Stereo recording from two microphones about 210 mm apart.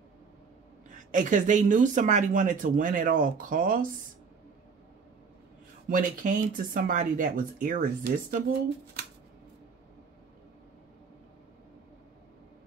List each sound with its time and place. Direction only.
0.8 s speech: 40° right (ahead or behind)
5.9 s speech: 40° right (ahead or behind)